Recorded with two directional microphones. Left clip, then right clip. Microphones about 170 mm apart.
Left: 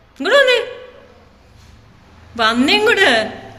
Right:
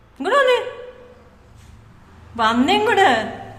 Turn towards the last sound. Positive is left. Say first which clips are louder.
# left 3 dB
turn(degrees=-15)  # may be behind; listen again after turning